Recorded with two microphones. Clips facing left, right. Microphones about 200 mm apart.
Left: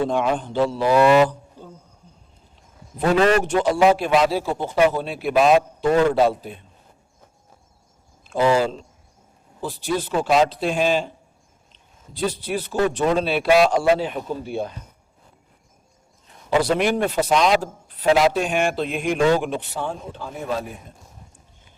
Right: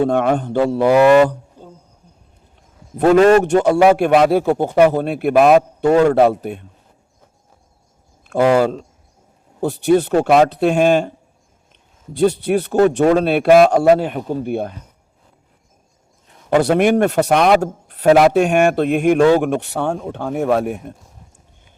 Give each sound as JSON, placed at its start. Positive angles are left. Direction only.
{"t": 0.0, "sound": "a man's voice", "side_deg": -55}
{"t": 2.6, "sound": "a sound", "side_deg": -50}
{"t": 3.6, "sound": "a man's voice", "side_deg": -60}
{"t": 8.3, "sound": "a man's voice", "side_deg": -60}
{"t": 9.6, "sound": "a man's voice", "side_deg": -65}
{"t": 16.5, "sound": "a man's voice", "side_deg": -55}
{"t": 18.0, "sound": "a man's voice", "side_deg": -50}
{"t": 19.7, "sound": "speech", "side_deg": -65}